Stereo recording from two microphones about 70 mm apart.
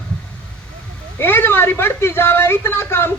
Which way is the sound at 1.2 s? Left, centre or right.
Left.